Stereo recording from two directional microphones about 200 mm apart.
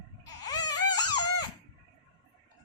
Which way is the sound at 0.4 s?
20° left (ahead or behind).